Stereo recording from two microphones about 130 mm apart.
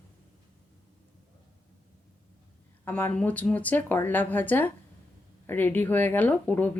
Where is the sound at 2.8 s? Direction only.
10° left (ahead or behind).